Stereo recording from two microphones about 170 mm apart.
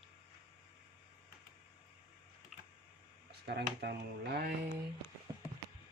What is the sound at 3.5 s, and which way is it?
Speech, 75° right (ahead or behind).